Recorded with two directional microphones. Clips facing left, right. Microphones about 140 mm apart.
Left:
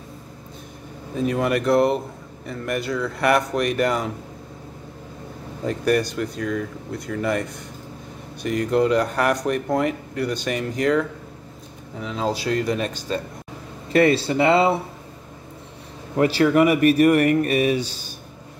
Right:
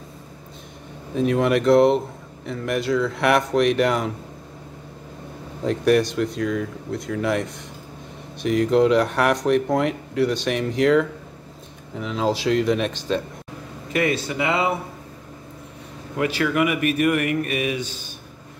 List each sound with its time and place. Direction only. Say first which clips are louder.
1.1 s speech: right 2 dB; centre (ahead or behind)
5.6 s speech: right 3 dB; centre (ahead or behind)
13.9 s speech: left 5 dB; 35° left (ahead or behind)
16.2 s speech: left 5 dB; 35° left (ahead or behind)